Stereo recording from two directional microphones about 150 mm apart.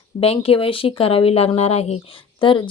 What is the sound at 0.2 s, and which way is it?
A woman's voice, 40° left (ahead or behind).